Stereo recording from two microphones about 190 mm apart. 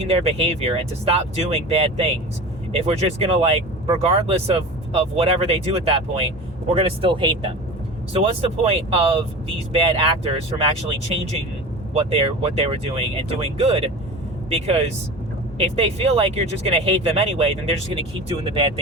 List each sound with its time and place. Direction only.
0.0 s speech: 35° right (ahead or behind)